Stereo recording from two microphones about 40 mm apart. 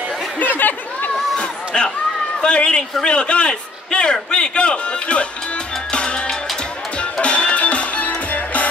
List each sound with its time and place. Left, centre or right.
0.4 s chatter: left
1.7 s a sound: left
2.4 s a man's voice: left
5.9 s music: left